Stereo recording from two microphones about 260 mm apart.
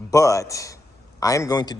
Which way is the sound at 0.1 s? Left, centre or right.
Centre.